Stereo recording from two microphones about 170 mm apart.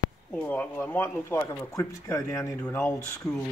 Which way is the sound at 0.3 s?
10° left (ahead or behind).